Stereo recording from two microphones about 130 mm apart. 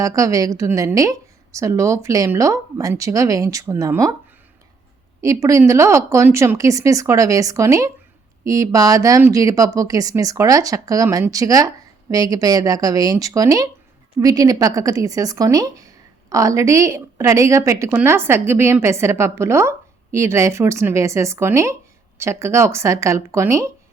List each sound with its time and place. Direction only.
0.0 s a woman's voice: 25° right (ahead or behind)
5.2 s a woman's voice: 25° right (ahead or behind)